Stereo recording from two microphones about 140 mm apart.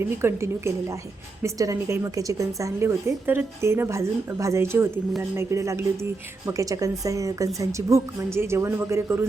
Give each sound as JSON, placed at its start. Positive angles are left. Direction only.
{"t": 0.2, "sound": "a woman's voice", "side_deg": -15}